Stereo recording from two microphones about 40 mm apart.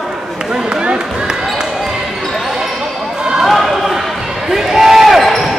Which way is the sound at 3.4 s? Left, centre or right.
Centre.